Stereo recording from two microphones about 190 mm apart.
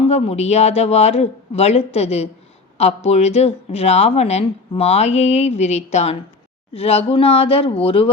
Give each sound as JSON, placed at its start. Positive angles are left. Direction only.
{"t": 0.1, "sound": "a woman's voice", "side_deg": 35}